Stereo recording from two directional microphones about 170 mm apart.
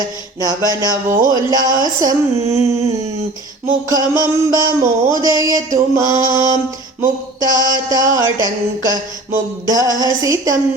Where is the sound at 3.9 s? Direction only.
20° right (ahead or behind).